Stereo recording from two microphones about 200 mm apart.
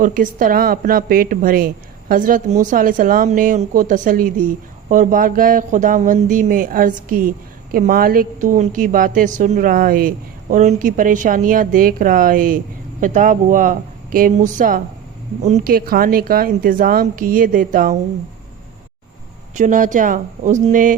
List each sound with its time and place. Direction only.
0.0 s a woman's voice: 45° right (ahead or behind)
19.5 s speech: 40° right (ahead or behind)